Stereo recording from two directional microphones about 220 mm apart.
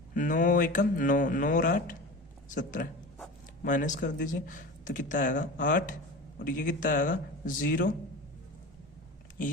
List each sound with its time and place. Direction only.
0.1 s speech: 35° left (ahead or behind)